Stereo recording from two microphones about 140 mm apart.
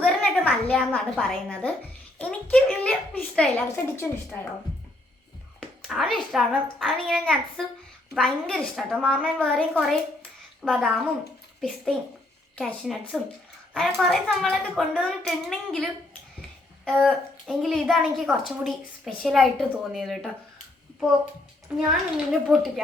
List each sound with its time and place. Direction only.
0.0 s a woman's voice: 5° left (ahead or behind)
3.9 s a child's voice: 15° left (ahead or behind)
5.9 s a woman's voice: centre (ahead or behind)
12.5 s a woman's voice: 5° left (ahead or behind)
21.8 s a woman's voice: 5° right (ahead or behind)